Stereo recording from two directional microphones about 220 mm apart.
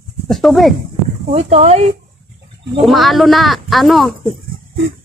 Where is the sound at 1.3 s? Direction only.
30° right (ahead or behind).